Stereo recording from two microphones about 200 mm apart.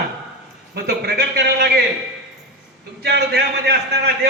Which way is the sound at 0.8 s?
55° right (ahead or behind).